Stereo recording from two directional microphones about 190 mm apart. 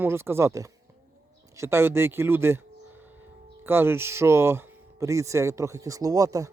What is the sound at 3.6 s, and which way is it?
Speech, 10° right (ahead or behind).